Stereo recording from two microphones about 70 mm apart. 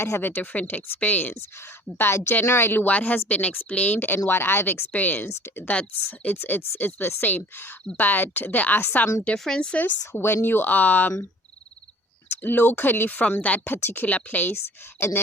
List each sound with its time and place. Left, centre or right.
0.0 s a woman's voice: left; by 5.9 s centre
6.1 s speech: left
9.4 s speech: centre
10.1 s speech: left
12.4 s speech: left